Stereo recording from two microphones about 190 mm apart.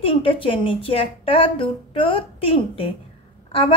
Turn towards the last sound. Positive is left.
turn(degrees=30)  # may be behind; listen again after turning